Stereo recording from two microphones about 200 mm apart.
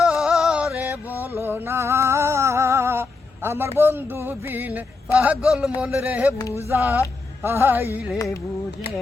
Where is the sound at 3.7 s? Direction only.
10° right (ahead or behind).